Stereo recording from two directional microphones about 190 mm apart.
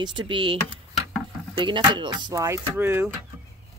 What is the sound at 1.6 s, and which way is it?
Speech, 25° right (ahead or behind).